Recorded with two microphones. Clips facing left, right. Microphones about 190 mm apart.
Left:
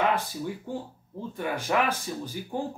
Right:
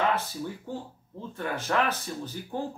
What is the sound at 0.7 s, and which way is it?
Speech, 15° left (ahead or behind).